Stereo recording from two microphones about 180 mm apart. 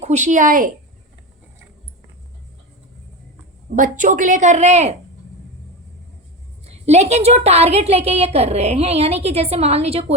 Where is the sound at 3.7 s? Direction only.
45° right (ahead or behind).